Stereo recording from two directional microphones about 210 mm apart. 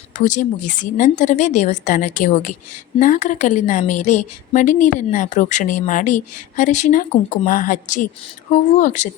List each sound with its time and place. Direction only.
0.3 s a woman's voice: 35° left (ahead or behind)